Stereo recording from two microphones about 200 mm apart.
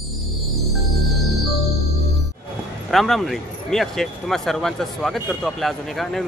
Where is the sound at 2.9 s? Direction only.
Centre (ahead or behind).